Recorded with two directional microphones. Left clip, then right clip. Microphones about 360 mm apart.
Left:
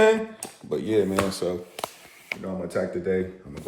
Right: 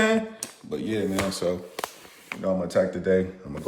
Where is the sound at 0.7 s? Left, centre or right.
Centre.